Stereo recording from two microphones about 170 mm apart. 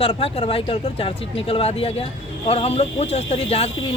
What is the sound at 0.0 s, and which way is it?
Speech, 35° left (ahead or behind).